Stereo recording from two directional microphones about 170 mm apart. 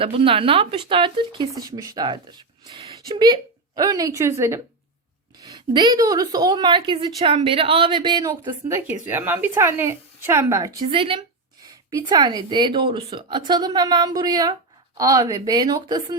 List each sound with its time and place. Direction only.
0.0 s a woman's voice: 35° right (ahead or behind)